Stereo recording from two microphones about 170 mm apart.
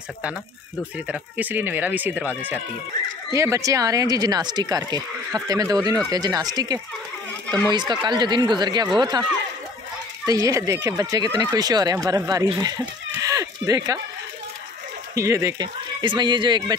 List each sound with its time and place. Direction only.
0.9 s speech: 10° right (ahead or behind); by 9.2 s 25° right (ahead or behind)
10.2 s speech: 20° right (ahead or behind)
15.1 s speech: 15° right (ahead or behind)